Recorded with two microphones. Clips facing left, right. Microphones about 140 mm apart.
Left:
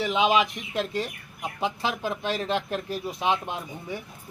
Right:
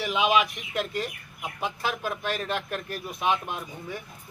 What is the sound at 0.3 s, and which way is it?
Speech, 25° left (ahead or behind).